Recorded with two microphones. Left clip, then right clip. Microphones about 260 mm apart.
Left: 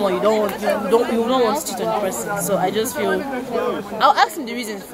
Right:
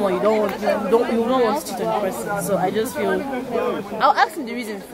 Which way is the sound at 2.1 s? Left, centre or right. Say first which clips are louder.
Left 1 dB; right.